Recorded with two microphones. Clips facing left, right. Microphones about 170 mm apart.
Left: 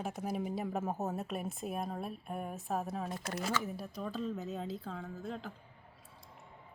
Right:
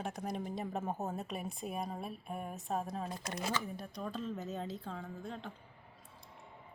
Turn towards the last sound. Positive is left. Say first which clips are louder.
# left 2 dB
turn(degrees=0)  # may be behind; listen again after turning